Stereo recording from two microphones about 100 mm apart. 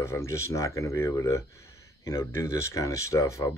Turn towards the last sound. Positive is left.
turn(degrees=30)  # may be behind; listen again after turning